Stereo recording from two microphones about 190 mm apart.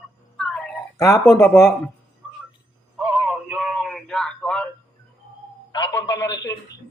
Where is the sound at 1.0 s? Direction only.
15° left (ahead or behind).